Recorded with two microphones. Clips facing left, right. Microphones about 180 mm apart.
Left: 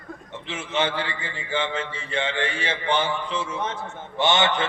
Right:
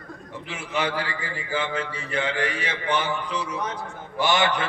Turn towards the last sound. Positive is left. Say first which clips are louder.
# left 1 dB
turn(degrees=25)  # may be behind; listen again after turning